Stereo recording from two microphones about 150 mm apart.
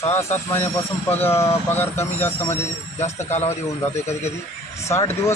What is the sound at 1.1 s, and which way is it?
Speech, 15° left (ahead or behind).